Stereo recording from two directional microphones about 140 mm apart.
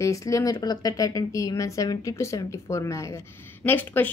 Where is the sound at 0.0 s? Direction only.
25° left (ahead or behind).